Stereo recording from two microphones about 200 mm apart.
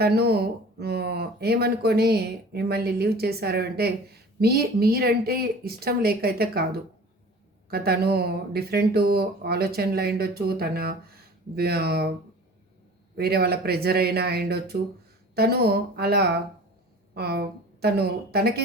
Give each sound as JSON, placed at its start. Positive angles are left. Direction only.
{"t": 0.0, "sound": "speech", "side_deg": -55}
{"t": 13.1, "sound": "speech", "side_deg": -50}